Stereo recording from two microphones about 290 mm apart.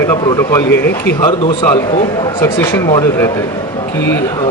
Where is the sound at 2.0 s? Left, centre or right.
Centre.